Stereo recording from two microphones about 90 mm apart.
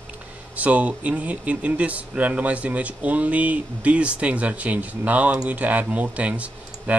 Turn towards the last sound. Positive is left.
turn(degrees=-15)  # may be behind; listen again after turning